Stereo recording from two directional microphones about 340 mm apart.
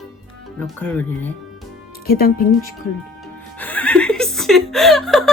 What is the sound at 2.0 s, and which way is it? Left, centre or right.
Speech, left.